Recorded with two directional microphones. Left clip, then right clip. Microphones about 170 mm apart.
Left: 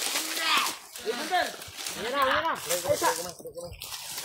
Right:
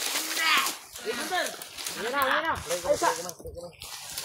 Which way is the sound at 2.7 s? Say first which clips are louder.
Left 1 dB; 40° left (ahead or behind).